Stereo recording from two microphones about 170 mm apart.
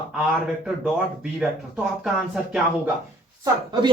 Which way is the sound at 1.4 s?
5° right (ahead or behind).